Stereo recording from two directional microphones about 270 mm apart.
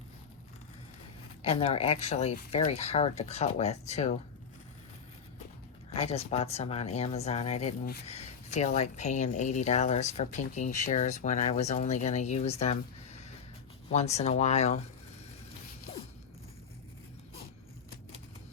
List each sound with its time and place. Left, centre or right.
1.4 s speech: left
5.9 s speech: left